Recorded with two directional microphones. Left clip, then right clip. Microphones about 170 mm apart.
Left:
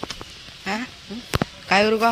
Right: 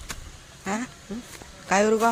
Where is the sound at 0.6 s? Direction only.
Centre (ahead or behind).